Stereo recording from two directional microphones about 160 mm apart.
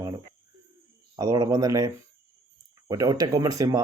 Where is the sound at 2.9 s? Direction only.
20° right (ahead or behind).